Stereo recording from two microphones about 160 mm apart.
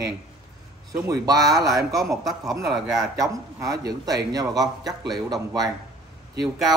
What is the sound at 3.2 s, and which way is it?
A man's voice, 20° right (ahead or behind).